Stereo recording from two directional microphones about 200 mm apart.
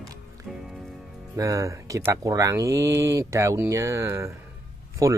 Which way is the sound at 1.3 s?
15° right (ahead or behind).